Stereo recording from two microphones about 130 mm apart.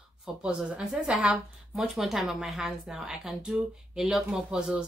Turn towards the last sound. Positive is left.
turn(degrees=-5)  # may be behind; listen again after turning